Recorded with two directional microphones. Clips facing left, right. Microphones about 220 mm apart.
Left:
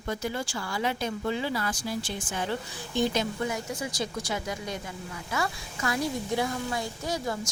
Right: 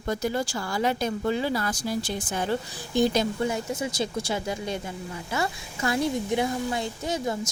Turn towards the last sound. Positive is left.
turn(degrees=-20)  # may be behind; listen again after turning